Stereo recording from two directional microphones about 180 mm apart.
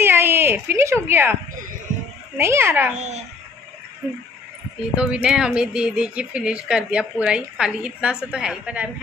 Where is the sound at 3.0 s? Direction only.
40° right (ahead or behind).